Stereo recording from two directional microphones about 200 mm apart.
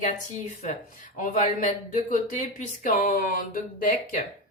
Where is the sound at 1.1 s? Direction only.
40° left (ahead or behind).